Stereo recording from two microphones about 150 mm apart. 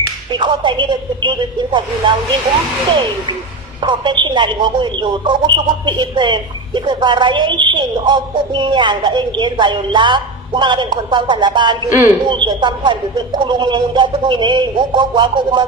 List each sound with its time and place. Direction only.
0.3 s speech: 30° right (ahead or behind)
3.8 s speech: 30° right (ahead or behind)
11.9 s a man's voice: 15° right (ahead or behind)
12.3 s speech: 30° right (ahead or behind)